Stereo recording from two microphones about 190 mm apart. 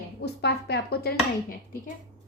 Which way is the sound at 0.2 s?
60° left (ahead or behind).